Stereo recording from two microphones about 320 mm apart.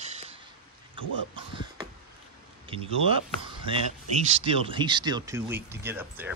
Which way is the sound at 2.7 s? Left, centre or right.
Centre.